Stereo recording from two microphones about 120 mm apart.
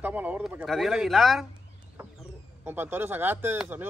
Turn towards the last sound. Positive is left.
turn(degrees=-15)  # may be behind; listen again after turning